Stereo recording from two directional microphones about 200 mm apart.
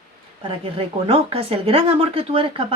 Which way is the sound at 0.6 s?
30° right (ahead or behind).